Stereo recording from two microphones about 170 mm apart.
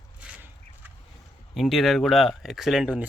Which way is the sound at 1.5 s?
Centre (ahead or behind).